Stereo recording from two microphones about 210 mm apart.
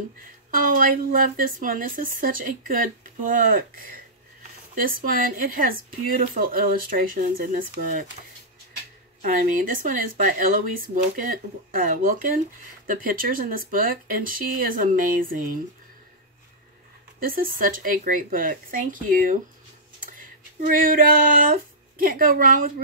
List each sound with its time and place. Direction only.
0.6 s speech: 40° right (ahead or behind)
9.2 s speech: 40° right (ahead or behind)
17.2 s speech: 45° right (ahead or behind)